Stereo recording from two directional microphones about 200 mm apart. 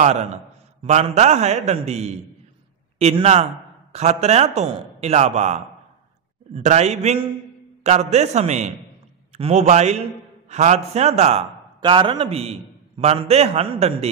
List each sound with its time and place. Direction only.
0.0 s a man's voice: 35° right (ahead or behind)